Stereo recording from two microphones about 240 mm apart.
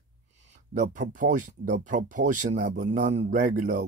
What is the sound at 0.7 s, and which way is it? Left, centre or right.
Speech, right.